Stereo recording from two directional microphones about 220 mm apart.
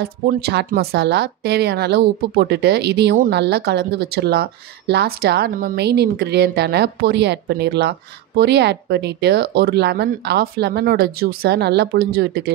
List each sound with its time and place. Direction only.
0.0 s a woman's voice: 45° right (ahead or behind)